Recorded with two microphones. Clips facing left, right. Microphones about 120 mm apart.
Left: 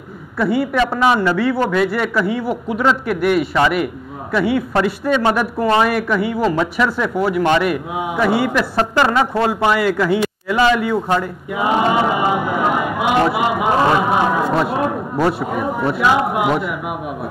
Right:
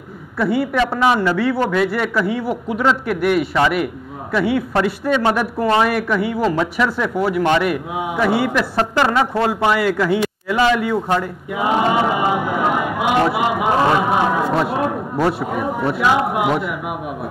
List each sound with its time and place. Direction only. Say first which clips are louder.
0.4 s a man's voice: left 1 dB; 20° left (ahead or behind)